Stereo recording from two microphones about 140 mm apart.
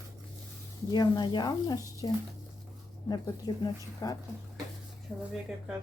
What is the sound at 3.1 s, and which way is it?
Speech, 30° left (ahead or behind).